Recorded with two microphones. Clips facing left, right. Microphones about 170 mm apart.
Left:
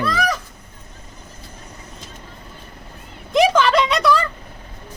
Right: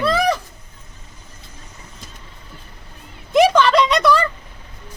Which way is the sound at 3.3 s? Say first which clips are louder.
Right 2 dB; centre (ahead or behind).